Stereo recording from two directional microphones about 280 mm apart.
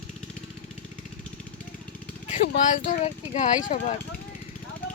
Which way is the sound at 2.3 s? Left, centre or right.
Left.